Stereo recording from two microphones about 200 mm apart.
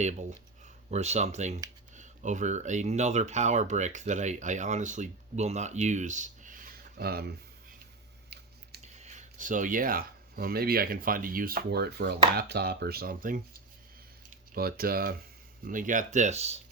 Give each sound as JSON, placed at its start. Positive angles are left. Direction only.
{"t": 0.0, "sound": "speech", "side_deg": -35}
{"t": 8.8, "sound": "speech", "side_deg": -35}
{"t": 12.3, "sound": "chopping", "side_deg": -55}
{"t": 14.3, "sound": "speech", "side_deg": -50}